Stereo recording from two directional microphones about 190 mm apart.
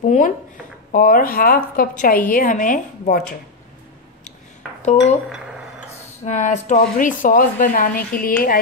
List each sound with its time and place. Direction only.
0.0 s speech: 40° left (ahead or behind)
6.2 s speech: 40° left (ahead or behind)